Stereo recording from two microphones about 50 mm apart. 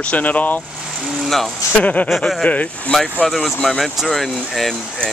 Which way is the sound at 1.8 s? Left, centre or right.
Left.